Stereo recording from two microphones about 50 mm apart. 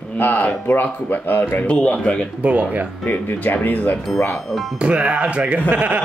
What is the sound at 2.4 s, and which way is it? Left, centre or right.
Speech, right.